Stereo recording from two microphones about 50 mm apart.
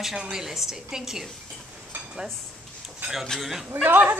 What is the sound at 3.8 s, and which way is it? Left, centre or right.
Speech, right.